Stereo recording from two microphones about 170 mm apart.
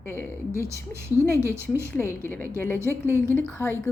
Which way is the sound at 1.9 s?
15° left (ahead or behind).